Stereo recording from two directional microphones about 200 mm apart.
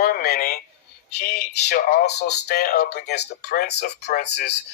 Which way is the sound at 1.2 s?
50° left (ahead or behind).